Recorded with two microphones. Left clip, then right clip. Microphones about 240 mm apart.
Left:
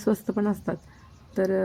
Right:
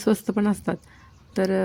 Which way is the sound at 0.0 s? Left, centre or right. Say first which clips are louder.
Right 3 dB; right.